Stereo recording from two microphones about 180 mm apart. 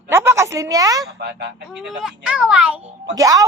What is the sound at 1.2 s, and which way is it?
Speech, 65° right (ahead or behind).